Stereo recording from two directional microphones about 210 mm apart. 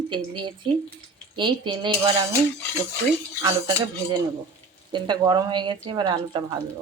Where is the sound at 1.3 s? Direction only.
20° right (ahead or behind).